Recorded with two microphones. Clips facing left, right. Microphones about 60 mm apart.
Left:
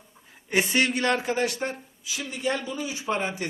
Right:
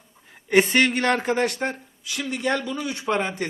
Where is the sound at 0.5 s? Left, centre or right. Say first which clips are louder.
Right 5 dB; right.